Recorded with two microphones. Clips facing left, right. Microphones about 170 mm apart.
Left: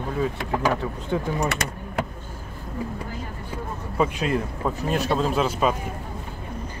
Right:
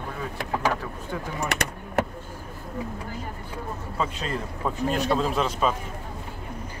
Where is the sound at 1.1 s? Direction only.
20° left (ahead or behind).